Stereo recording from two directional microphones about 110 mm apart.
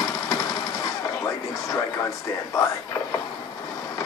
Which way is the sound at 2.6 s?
25° left (ahead or behind).